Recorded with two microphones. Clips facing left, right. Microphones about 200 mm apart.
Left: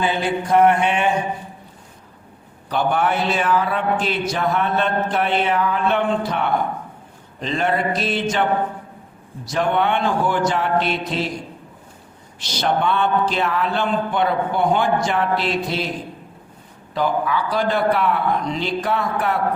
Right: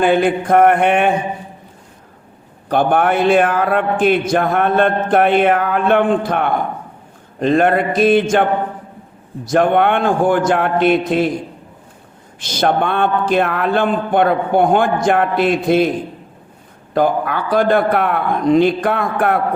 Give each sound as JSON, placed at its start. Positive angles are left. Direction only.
{"t": 0.0, "sound": "mantra", "side_deg": -55}
{"t": 2.6, "sound": "a man's voice", "side_deg": -50}
{"t": 12.4, "sound": "a man's voice", "side_deg": -50}
{"t": 16.9, "sound": "a man's voice", "side_deg": -55}